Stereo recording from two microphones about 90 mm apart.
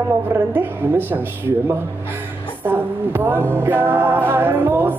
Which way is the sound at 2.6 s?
25° right (ahead or behind).